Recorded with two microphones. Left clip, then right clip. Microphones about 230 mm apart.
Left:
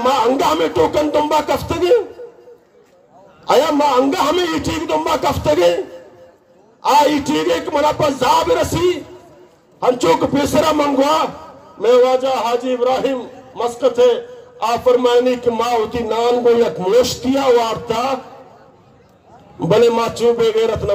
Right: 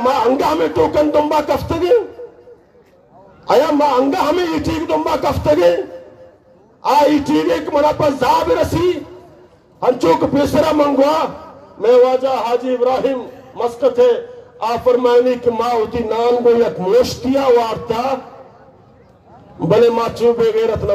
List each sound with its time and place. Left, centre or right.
0.0 s a man's voice: left
3.4 s a man's voice: left
6.8 s a man's voice: left
19.6 s a man's voice: left